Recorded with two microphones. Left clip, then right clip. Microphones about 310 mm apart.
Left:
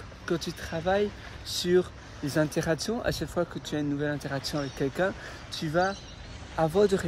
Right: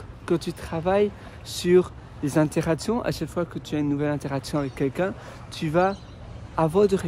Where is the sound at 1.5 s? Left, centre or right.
Right.